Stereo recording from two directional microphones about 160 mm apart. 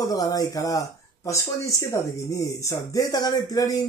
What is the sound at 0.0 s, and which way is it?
Speech, 20° left (ahead or behind).